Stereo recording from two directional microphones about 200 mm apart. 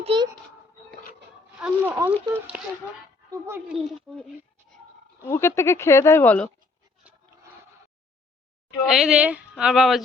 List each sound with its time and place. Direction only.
0.0 s a sound: 25° right (ahead or behind)
1.5 s speech: 10° right (ahead or behind)
4.1 s speech: centre (ahead or behind)
5.3 s speech: 10° left (ahead or behind)
8.9 s speech: centre (ahead or behind)